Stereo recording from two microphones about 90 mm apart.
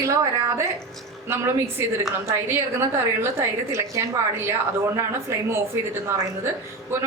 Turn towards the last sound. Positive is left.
turn(degrees=-25)  # may be behind; listen again after turning